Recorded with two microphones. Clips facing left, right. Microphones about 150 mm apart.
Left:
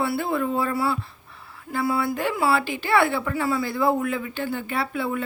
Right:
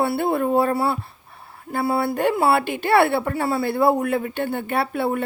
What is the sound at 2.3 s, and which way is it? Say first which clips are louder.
Speech: right 4 dB; 55° right (ahead or behind).